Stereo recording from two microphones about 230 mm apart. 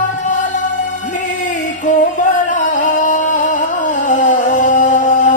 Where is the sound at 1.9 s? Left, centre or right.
Left.